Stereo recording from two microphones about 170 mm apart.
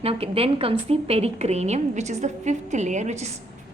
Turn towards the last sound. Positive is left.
turn(degrees=-40)  # may be behind; listen again after turning